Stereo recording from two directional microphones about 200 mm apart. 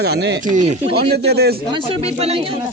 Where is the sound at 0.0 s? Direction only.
55° right (ahead or behind).